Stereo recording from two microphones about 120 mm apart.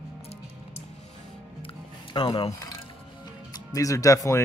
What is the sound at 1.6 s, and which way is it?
Music, 45° left (ahead or behind).